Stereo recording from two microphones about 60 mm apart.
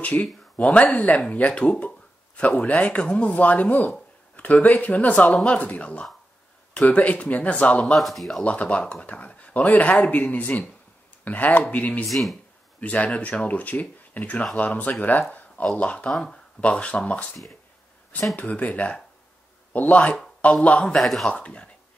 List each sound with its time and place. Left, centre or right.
0.0 s speech: left
7.8 s speech: centre
8.5 s speech: left
12.1 s speech: centre
12.8 s a man's voice: left
18.3 s a man's voice: left
21.0 s speech: centre
21.3 s speech: centre